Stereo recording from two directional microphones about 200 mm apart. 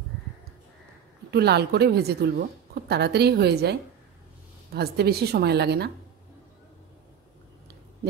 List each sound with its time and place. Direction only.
1.3 s a woman's voice: 55° right (ahead or behind)
4.7 s a woman's voice: 55° right (ahead or behind)